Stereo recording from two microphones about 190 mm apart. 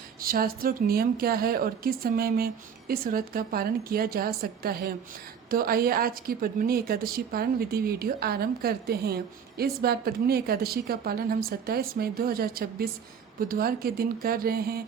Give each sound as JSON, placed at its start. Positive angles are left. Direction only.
{"t": 0.2, "sound": "a woman's voice", "side_deg": -50}